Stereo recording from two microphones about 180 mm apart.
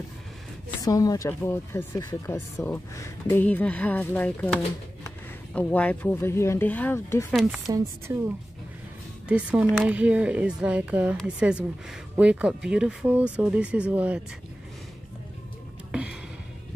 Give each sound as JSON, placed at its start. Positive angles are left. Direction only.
{"t": 0.8, "sound": "speech", "side_deg": 20}
{"t": 7.2, "sound": "speech", "side_deg": 0}
{"t": 8.1, "sound": "speech", "side_deg": -15}
{"t": 9.3, "sound": "speech", "side_deg": -5}
{"t": 15.9, "sound": "a sound", "side_deg": -5}